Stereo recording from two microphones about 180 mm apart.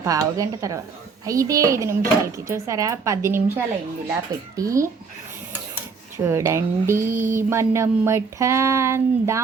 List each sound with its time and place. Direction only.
0.0 s speech: 20° right (ahead or behind)
6.1 s speech: 15° right (ahead or behind)